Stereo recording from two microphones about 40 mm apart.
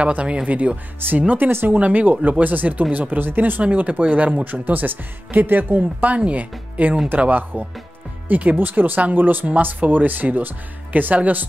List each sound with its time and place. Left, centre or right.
0.0 s speech: right
1.5 s speech: right
1.8 s speech: right
5.8 s speech: right